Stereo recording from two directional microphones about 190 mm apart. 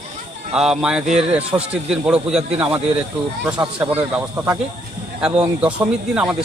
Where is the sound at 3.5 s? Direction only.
20° right (ahead or behind).